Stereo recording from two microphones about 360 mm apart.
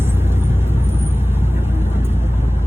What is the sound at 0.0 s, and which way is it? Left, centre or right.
Vehicle, centre.